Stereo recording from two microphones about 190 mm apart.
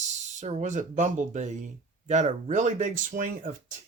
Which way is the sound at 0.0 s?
40° right (ahead or behind).